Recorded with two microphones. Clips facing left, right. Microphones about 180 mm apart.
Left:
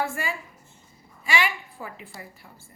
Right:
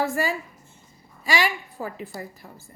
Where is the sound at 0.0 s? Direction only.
40° right (ahead or behind).